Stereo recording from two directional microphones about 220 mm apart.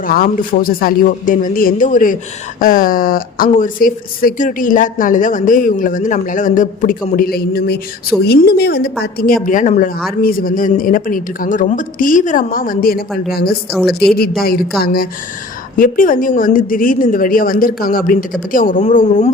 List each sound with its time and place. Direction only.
0.0 s speech: 40° left (ahead or behind)
13.7 s a woman's voice: 5° left (ahead or behind)
15.7 s speech: 40° left (ahead or behind)